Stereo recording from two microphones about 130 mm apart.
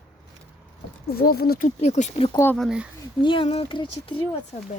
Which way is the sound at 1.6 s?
60° left (ahead or behind).